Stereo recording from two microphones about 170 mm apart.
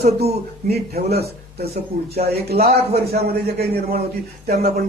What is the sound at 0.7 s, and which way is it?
Speech, 70° right (ahead or behind).